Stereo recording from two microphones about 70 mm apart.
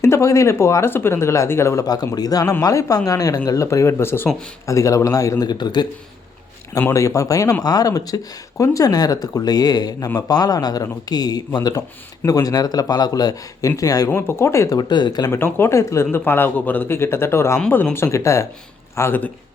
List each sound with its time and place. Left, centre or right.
0.0 s speech: left
2.1 s speech: left
4.6 s speech: left
5.5 s speech: left
6.9 s speech: left
7.6 s speech: left
14.2 s speech: left
14.8 s speech: left
15.3 s speech: left